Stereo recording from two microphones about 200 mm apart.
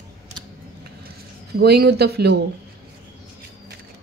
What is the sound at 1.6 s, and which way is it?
Speech, 55° right (ahead or behind).